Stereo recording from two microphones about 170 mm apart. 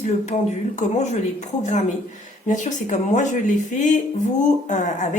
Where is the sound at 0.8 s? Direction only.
40° left (ahead or behind).